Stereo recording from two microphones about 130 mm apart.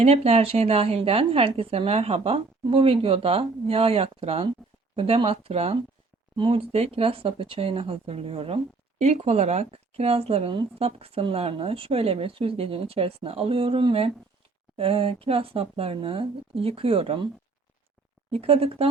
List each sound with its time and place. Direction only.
0.0 s speech: 50° right (ahead or behind)
18.3 s speech: 45° right (ahead or behind)